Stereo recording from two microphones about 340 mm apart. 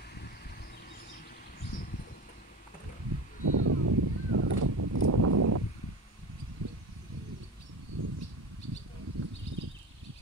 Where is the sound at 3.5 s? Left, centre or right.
Right.